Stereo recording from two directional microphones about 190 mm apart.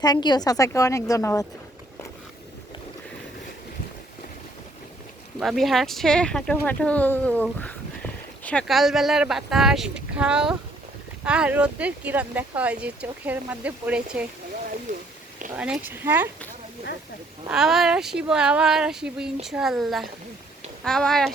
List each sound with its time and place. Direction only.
0.0 s a woman's voice: 20° left (ahead or behind)
5.4 s speech: centre (ahead or behind)
15.5 s speech: 5° right (ahead or behind)
17.5 s speech: centre (ahead or behind)